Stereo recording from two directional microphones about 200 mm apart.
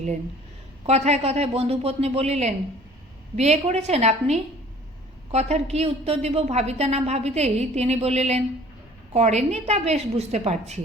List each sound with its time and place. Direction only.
0.9 s a woman's voice: 35° right (ahead or behind)